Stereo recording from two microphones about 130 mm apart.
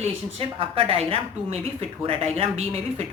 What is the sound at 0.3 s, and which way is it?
A woman's voice, 50° right (ahead or behind).